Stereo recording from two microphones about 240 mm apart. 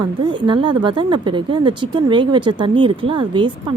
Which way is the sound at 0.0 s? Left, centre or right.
Centre.